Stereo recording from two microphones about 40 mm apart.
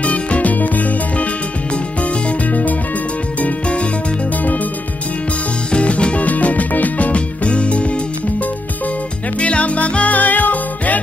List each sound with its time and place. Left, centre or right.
0.0 s music: left
5.7 s music: left
9.4 s music: left